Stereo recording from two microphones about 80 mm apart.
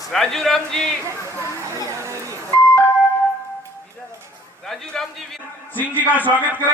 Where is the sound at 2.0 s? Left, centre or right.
Right.